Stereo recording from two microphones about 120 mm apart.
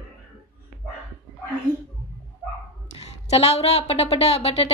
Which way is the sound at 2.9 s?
60° left (ahead or behind).